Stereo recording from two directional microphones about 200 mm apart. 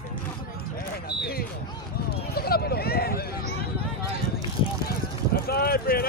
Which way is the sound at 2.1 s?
50° left (ahead or behind).